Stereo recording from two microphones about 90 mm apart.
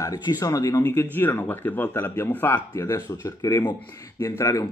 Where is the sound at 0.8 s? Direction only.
25° left (ahead or behind).